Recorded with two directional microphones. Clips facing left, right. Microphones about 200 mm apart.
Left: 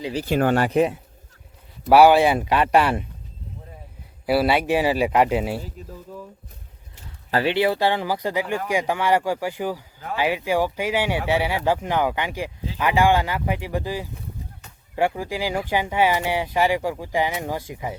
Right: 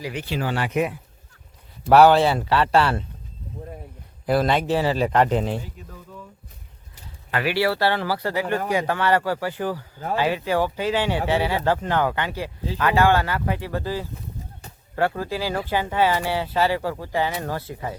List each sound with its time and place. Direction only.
0.0 s speech: 30° left (ahead or behind)
0.3 s speech: 50° left (ahead or behind)
0.7 s speech: 30° left (ahead or behind)
1.9 s speech: 10° left (ahead or behind)
4.3 s speech: 10° left (ahead or behind)
7.3 s speech: 35° left (ahead or behind)
7.5 s speech: 20° left (ahead or behind)